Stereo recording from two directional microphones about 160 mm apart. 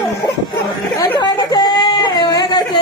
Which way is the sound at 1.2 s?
25° left (ahead or behind).